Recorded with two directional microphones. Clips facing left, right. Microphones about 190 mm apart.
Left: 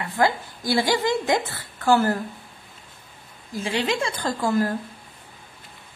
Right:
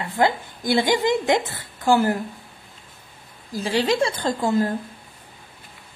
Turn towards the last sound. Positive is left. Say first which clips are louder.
# right 2 dB
turn(degrees=-25)  # may be behind; listen again after turning